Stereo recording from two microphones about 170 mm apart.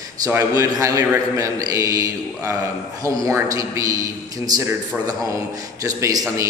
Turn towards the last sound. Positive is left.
turn(degrees=-20)  # may be behind; listen again after turning